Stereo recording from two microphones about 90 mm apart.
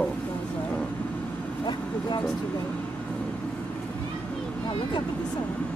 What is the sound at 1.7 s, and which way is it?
Speech, 55° left (ahead or behind).